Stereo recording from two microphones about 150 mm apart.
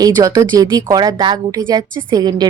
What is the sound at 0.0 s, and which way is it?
Speech, 25° right (ahead or behind).